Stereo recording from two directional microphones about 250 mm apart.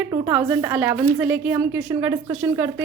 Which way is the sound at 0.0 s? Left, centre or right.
Centre.